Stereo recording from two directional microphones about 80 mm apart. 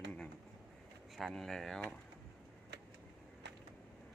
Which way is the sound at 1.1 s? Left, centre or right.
Centre.